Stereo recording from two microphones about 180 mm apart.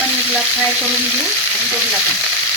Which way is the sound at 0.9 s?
5° right (ahead or behind).